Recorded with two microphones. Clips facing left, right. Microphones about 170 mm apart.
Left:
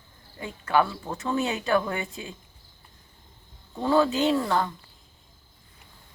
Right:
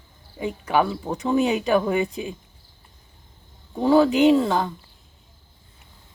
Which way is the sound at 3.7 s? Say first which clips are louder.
Right 5 dB; 15° right (ahead or behind).